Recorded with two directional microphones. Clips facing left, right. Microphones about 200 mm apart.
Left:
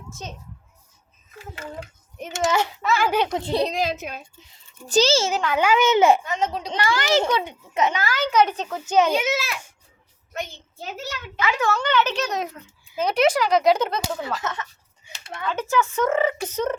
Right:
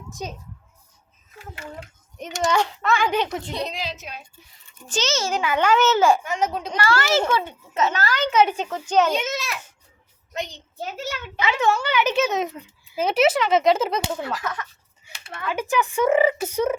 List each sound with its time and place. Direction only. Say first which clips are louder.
0.1 s a child's voice: right 4 dB; 15° right (ahead or behind)
2.1 s a child's voice: even; 5° left (ahead or behind)
3.4 s a child's voice: left 6 dB; 35° left (ahead or behind)
3.8 s a child's voice: left 7 dB; 50° left (ahead or behind)
4.9 s a child's voice: left 6 dB; 35° left (ahead or behind)
5.5 s a child's voice: left 1 dB; 10° left (ahead or behind)
6.2 s a child's voice: right 1 dB; 10° right (ahead or behind)
6.7 s a child's voice: even; 15° left (ahead or behind)
8.3 s speech: even; 5° right (ahead or behind)
8.9 s a child's voice: left 1 dB; 5° left (ahead or behind)
10.3 s a child's voice: right 2 dB; 20° right (ahead or behind)
11.8 s a child's voice: right 1 dB; 10° right (ahead or behind)
14.3 s speech: even; 25° left (ahead or behind)
15.4 s speech: even; 15° right (ahead or behind)